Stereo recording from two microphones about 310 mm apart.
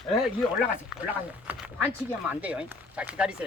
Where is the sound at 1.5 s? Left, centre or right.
Centre.